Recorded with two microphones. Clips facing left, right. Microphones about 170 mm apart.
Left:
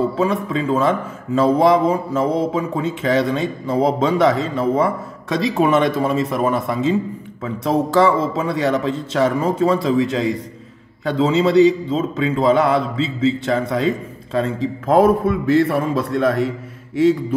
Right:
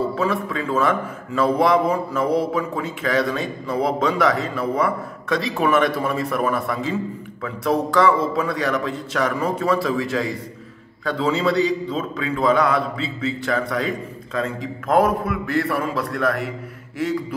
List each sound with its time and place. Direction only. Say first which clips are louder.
0.5 s a man's voice: left 3 dB; 20° left (ahead or behind)